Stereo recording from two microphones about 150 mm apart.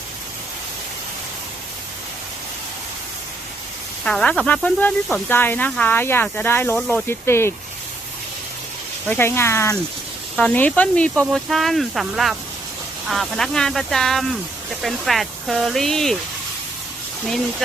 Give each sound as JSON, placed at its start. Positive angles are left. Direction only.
{"t": 4.0, "sound": "speech", "side_deg": 5}
{"t": 6.7, "sound": "speech", "side_deg": 0}
{"t": 7.1, "sound": "speech", "side_deg": 15}
{"t": 9.0, "sound": "speech", "side_deg": 15}